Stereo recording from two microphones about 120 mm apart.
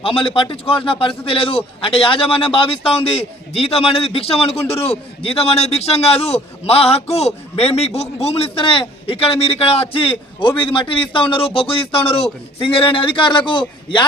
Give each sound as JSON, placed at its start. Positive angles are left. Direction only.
{"t": 0.0, "sound": "a man's voice", "side_deg": 50}